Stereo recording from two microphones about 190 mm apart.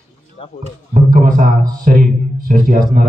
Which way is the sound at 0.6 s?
45° right (ahead or behind).